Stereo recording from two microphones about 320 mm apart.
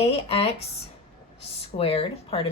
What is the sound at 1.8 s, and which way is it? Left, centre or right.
Speech, centre.